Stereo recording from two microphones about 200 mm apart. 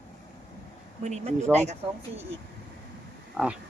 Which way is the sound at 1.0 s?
35° right (ahead or behind).